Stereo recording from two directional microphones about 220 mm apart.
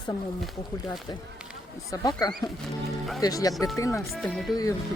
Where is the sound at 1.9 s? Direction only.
15° left (ahead or behind).